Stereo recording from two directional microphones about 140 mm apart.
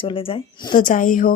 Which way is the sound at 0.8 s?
70° left (ahead or behind).